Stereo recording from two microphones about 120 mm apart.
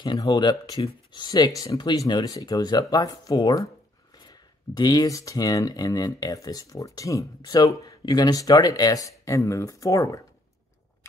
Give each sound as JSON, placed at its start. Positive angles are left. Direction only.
{"t": 0.0, "sound": "speech", "side_deg": 35}